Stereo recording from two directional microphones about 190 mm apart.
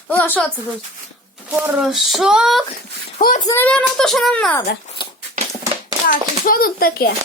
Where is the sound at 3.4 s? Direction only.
10° left (ahead or behind).